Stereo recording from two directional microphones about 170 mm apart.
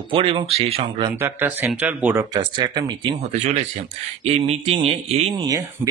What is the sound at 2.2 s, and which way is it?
Speech, 25° right (ahead or behind).